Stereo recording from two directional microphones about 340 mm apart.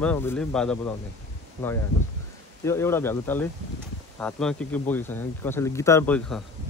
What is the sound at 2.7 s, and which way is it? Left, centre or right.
Speech, centre.